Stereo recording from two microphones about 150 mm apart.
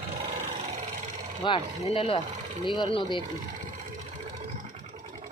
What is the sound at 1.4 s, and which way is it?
Speech, 35° left (ahead or behind).